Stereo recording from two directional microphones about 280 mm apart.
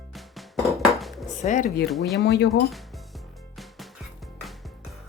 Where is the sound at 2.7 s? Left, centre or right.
Centre.